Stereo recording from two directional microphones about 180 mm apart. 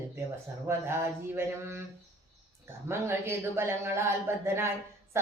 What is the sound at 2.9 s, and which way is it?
Speech, 15° right (ahead or behind).